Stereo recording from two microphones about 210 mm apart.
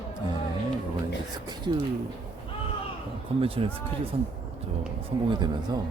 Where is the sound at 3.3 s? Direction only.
25° right (ahead or behind).